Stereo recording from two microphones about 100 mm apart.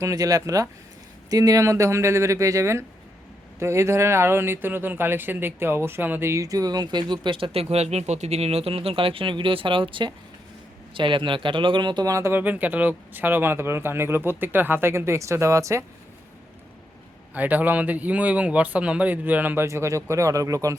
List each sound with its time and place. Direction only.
0.0 s speech: 35° right (ahead or behind)
12.1 s speech: 25° right (ahead or behind)
17.3 s speech: 15° right (ahead or behind); by 20.7 s 35° right (ahead or behind)